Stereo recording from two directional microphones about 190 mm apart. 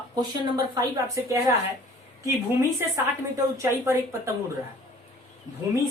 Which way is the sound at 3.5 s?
15° right (ahead or behind).